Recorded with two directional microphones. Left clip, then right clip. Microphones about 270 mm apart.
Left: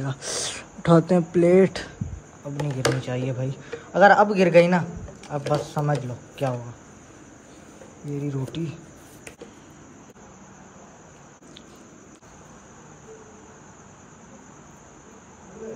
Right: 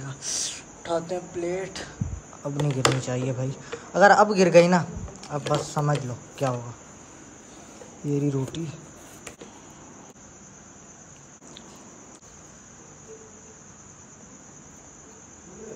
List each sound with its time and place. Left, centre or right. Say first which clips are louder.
0.0 s speech: left 2 dB; centre
2.4 s speech: right 1 dB; centre
8.2 s speech: even; centre